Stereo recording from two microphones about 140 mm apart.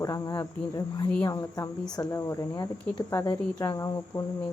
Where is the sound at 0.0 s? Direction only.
25° left (ahead or behind).